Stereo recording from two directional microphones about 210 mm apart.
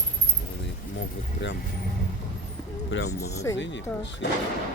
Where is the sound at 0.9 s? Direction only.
60° left (ahead or behind).